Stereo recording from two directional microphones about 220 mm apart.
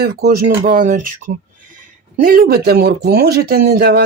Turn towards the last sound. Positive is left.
turn(degrees=-45)  # may be behind; listen again after turning